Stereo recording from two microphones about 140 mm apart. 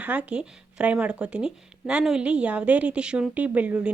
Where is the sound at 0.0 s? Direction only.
10° right (ahead or behind).